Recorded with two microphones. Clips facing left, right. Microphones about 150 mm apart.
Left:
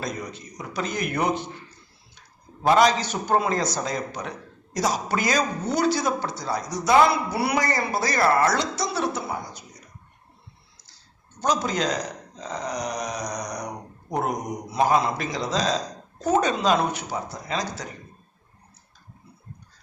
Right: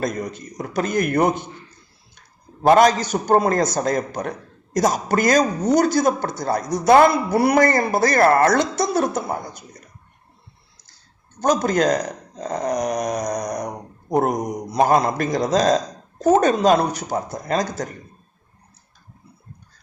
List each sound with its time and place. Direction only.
0.0 s a man's voice: 50° right (ahead or behind)
2.6 s a man's voice: 50° right (ahead or behind)
10.8 s a man's voice: 50° right (ahead or behind)